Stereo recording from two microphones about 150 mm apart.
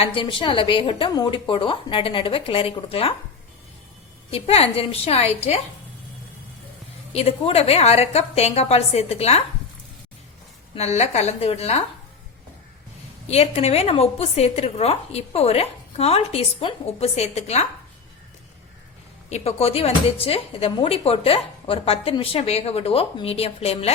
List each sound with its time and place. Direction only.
0.0 s speech: 35° left (ahead or behind)
4.3 s speech: 40° left (ahead or behind)
7.1 s a woman's voice: 45° left (ahead or behind)
10.8 s a woman's voice: 45° left (ahead or behind)
13.2 s a woman's voice: 45° left (ahead or behind)
19.3 s speech: 45° left (ahead or behind)